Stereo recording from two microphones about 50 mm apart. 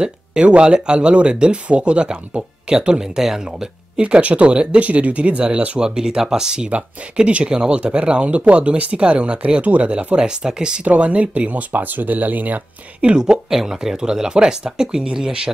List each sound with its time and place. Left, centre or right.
0.0 s speech: right
5.8 s speech: centre
6.7 s speech: right
13.0 s speech: centre